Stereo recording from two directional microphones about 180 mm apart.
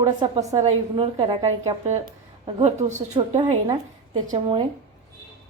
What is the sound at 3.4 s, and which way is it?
A woman's voice, 25° right (ahead or behind).